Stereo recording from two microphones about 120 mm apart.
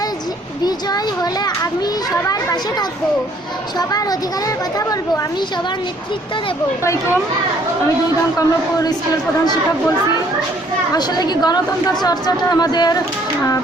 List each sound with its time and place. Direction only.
0.6 s a child's voice: 35° left (ahead or behind)
8.4 s a woman's voice: 30° left (ahead or behind)
10.9 s a woman's voice: 35° left (ahead or behind)